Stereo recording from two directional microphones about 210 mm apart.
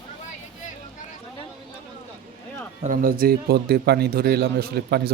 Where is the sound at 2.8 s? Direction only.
40° right (ahead or behind).